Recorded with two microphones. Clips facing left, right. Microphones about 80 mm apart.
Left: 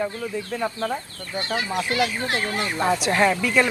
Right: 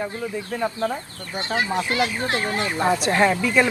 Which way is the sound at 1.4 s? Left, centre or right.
Right.